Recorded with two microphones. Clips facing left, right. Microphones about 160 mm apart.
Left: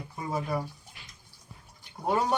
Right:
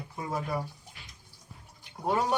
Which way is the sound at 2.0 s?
Centre (ahead or behind).